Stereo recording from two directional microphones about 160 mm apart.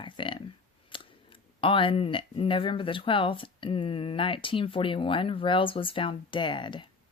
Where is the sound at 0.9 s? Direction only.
30° left (ahead or behind).